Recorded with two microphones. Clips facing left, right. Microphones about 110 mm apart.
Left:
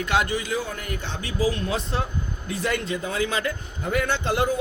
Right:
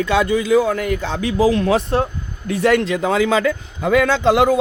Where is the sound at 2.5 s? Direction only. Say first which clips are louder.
Right 10 dB; 75° right (ahead or behind).